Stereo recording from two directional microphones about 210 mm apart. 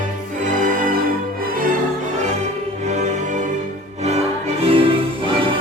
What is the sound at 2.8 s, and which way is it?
Music, 35° right (ahead or behind).